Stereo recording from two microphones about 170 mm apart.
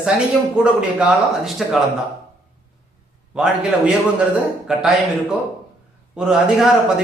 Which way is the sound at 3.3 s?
5° right (ahead or behind).